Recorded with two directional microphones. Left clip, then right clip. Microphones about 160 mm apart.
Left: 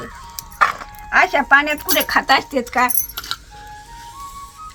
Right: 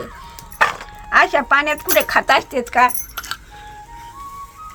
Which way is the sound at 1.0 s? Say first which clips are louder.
Even; 15° right (ahead or behind).